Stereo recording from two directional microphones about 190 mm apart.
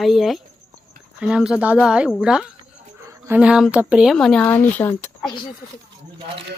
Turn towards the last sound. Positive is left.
turn(degrees=10)  # may be behind; listen again after turning